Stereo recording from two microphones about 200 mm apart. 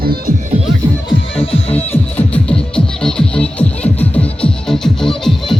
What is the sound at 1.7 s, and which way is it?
Music, 10° left (ahead or behind).